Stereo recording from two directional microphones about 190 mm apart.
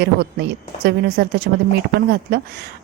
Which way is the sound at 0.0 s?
60° right (ahead or behind).